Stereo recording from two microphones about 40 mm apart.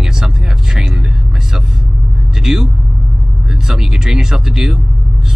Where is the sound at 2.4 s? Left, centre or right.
Centre.